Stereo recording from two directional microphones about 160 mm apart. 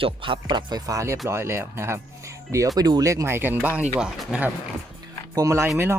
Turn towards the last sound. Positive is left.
turn(degrees=-20)  # may be behind; listen again after turning